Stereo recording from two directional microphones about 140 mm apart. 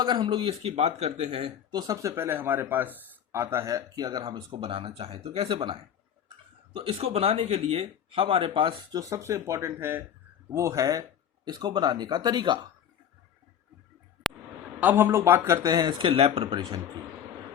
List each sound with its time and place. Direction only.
0.0 s speech: 35° right (ahead or behind)
1.7 s speech: 25° right (ahead or behind); by 5.7 s 40° right (ahead or behind)
6.7 s speech: 45° right (ahead or behind)
14.8 s speech: 15° right (ahead or behind); by 16.8 s 30° right (ahead or behind)